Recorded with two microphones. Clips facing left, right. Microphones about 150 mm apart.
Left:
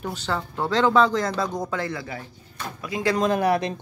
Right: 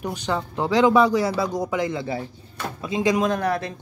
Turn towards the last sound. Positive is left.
turn(degrees=15)  # may be behind; listen again after turning